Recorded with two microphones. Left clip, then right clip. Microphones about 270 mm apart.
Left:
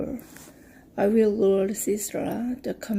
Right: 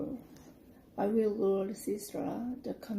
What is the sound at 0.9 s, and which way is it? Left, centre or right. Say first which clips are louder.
Speech: left 9 dB; left.